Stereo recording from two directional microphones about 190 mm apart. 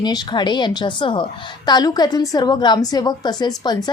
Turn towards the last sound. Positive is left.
turn(degrees=20)  # may be behind; listen again after turning